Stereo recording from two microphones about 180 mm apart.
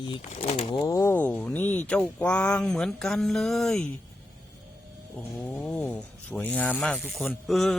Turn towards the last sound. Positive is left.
turn(degrees=0)  # may be behind; listen again after turning